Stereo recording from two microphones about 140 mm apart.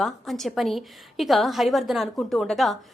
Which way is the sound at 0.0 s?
Centre (ahead or behind).